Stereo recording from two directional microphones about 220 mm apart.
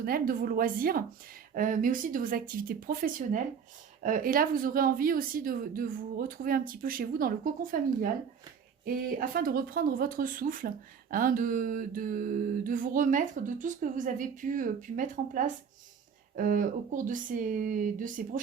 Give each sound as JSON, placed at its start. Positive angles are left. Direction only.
{"t": 0.0, "sound": "speech", "side_deg": -40}